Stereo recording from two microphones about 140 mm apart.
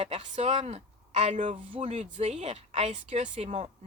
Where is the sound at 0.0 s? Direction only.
50° right (ahead or behind).